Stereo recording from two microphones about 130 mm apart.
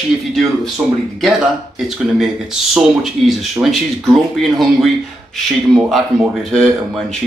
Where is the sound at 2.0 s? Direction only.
5° right (ahead or behind).